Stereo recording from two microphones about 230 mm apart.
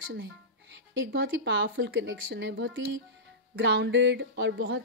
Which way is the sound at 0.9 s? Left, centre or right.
Right.